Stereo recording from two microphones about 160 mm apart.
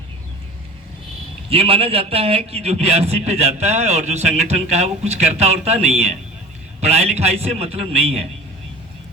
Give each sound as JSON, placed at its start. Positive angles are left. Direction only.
{"t": 1.5, "sound": "a man's voice", "side_deg": -35}